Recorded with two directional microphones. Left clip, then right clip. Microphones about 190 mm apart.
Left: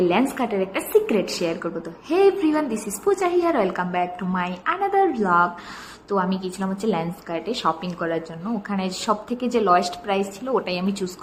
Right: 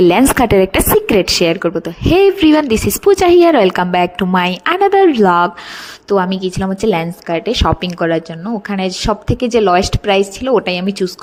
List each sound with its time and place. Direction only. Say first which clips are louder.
0.0 s a woman's voice: right 11 dB; 65° right (ahead or behind); by 11.1 s 35° right (ahead or behind)